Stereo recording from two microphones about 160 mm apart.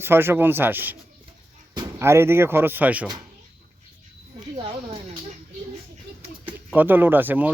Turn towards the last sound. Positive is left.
turn(degrees=-10)  # may be behind; listen again after turning